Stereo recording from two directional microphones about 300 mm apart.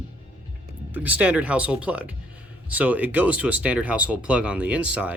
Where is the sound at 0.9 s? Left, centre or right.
Centre.